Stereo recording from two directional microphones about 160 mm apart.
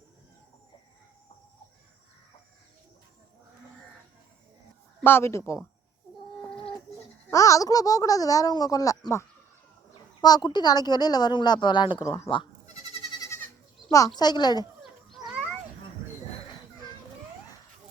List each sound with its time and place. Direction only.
4.9 s speech: 15° left (ahead or behind)
7.3 s speech: 20° left (ahead or behind)
13.1 s goat: 20° left (ahead or behind)
14.2 s speech: 25° left (ahead or behind)
15.1 s a sound: centre (ahead or behind)